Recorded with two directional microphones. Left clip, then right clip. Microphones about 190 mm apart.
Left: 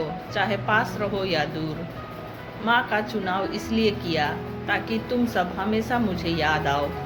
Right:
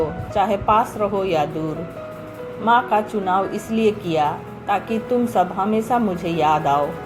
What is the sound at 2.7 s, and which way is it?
Speech, 20° right (ahead or behind).